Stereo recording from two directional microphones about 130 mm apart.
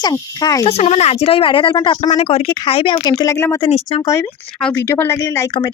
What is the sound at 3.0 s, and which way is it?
Speech, 30° left (ahead or behind).